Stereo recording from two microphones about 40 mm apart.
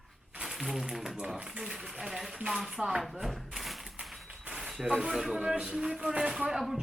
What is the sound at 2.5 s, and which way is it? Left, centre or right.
Speech, centre.